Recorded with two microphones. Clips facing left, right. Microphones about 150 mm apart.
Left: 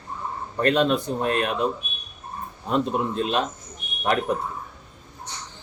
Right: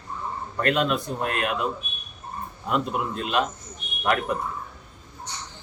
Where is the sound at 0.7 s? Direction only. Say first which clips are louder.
Left 3 dB; 30° left (ahead or behind).